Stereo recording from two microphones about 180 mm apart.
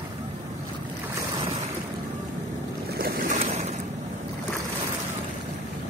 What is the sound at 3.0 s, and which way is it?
Boat, 55° right (ahead or behind).